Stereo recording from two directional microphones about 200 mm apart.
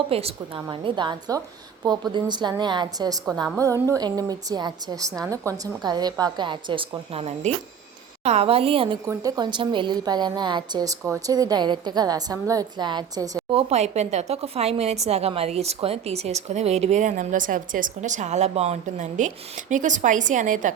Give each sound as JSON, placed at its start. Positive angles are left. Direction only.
{"t": 0.1, "sound": "a woman's voice", "side_deg": -30}
{"t": 13.6, "sound": "speech", "side_deg": -30}